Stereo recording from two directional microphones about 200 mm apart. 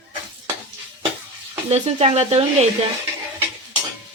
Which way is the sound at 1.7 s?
30° right (ahead or behind).